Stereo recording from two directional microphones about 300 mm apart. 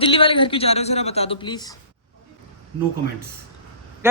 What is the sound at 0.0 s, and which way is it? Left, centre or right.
A woman's voice, centre.